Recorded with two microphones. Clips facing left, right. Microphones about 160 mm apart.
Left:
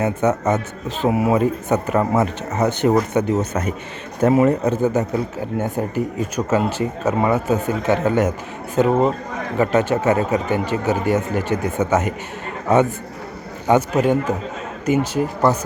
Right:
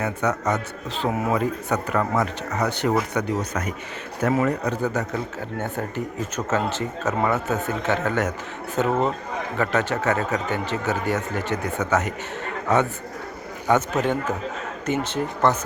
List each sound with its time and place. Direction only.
0.0 s speech: 25° left (ahead or behind)
1.0 s speech: 10° left (ahead or behind)
1.3 s speech: 25° left (ahead or behind)
5.9 s a man's voice: 10° left (ahead or behind)